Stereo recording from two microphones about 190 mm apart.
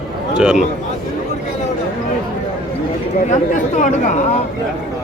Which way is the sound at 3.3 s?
40° left (ahead or behind).